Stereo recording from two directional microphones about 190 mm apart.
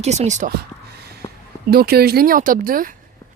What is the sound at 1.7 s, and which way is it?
Speech, 55° right (ahead or behind).